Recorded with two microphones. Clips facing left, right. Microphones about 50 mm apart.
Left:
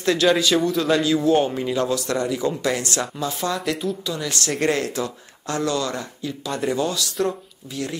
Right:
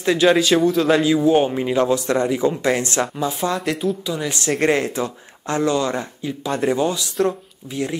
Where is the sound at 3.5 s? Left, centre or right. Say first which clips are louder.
Right 3 dB; centre.